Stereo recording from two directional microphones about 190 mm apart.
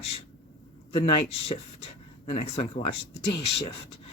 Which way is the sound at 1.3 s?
30° left (ahead or behind).